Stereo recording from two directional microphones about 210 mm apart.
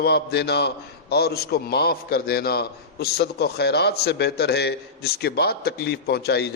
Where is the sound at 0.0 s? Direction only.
50° left (ahead or behind).